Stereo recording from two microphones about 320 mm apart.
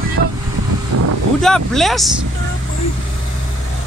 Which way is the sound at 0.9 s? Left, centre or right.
Right.